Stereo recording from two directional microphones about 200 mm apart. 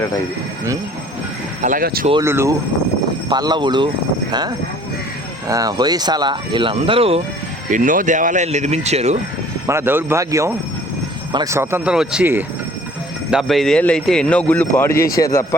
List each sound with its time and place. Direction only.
1.6 s speech: 45° right (ahead or behind)
2.2 s speech: 15° right (ahead or behind)
7.7 s speech: 40° right (ahead or behind)
9.6 s speech: 10° right (ahead or behind)
13.3 s a man's voice: centre (ahead or behind)